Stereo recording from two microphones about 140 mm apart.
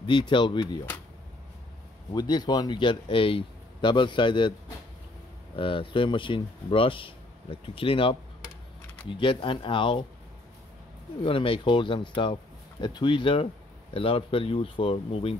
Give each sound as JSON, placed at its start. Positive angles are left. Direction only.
{"t": 0.0, "sound": "a man's voice", "side_deg": 35}
{"t": 2.1, "sound": "a man's voice", "side_deg": 30}
{"t": 5.6, "sound": "a man's voice", "side_deg": 40}
{"t": 11.2, "sound": "a man's voice", "side_deg": 40}